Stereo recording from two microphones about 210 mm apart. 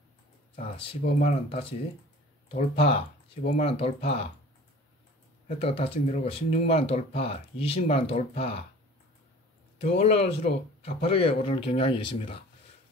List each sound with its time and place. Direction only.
0.7 s speech: 30° left (ahead or behind)
5.6 s speech: 30° left (ahead or behind)
9.8 s speech: 30° left (ahead or behind)